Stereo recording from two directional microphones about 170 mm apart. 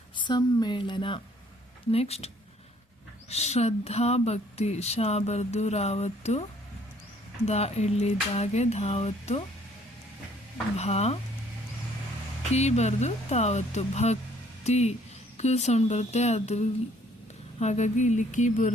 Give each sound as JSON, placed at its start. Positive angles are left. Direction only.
{"t": 0.2, "sound": "a woman's voice", "side_deg": 25}
{"t": 7.4, "sound": "speech", "side_deg": 40}
{"t": 10.8, "sound": "speech", "side_deg": 40}
{"t": 12.5, "sound": "speech", "side_deg": 40}
{"t": 17.6, "sound": "a sound", "side_deg": 40}